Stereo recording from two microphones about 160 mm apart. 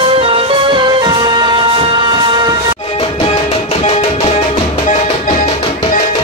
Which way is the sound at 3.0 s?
40° left (ahead or behind).